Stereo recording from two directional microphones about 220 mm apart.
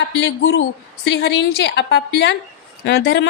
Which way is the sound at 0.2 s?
60° left (ahead or behind).